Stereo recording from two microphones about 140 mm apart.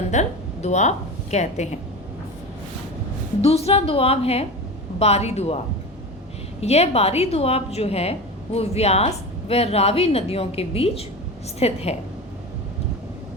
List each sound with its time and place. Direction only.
0.1 s a woman's voice: 55° left (ahead or behind)
3.4 s a woman's voice: 50° left (ahead or behind)
6.6 s a woman's voice: 50° left (ahead or behind)